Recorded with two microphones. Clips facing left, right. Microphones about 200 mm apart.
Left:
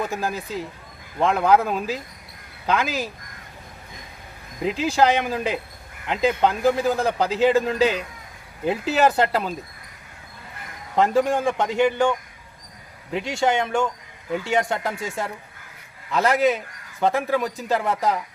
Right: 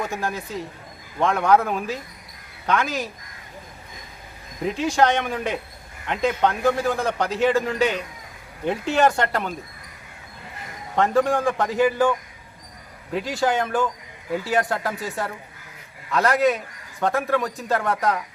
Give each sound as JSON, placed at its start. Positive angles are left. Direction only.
{"t": 0.0, "sound": "speech", "side_deg": 0}
{"t": 4.8, "sound": "speech", "side_deg": 0}
{"t": 8.6, "sound": "speech", "side_deg": 0}
{"t": 10.9, "sound": "speech", "side_deg": 0}
{"t": 13.1, "sound": "speech", "side_deg": 0}